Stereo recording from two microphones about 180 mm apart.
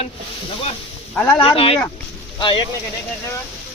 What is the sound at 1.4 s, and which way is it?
Speech, 30° left (ahead or behind).